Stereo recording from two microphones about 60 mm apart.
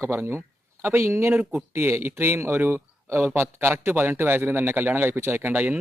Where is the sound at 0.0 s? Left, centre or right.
Right.